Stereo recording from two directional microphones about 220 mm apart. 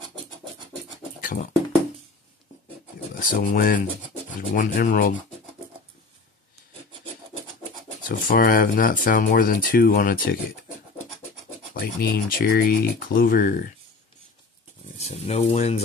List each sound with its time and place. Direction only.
1.2 s music: 40° left (ahead or behind)
3.2 s speech: 40° left (ahead or behind)
8.1 s speech: 40° left (ahead or behind)
11.7 s speech: 40° left (ahead or behind)
15.0 s speech: 30° left (ahead or behind)